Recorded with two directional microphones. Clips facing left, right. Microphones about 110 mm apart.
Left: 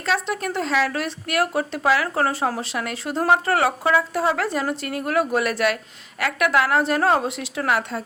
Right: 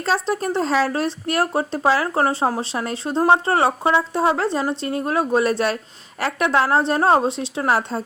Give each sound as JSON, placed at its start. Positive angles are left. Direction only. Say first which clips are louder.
{"t": 0.0, "sound": "speech", "louder": "right 3 dB", "side_deg": -35}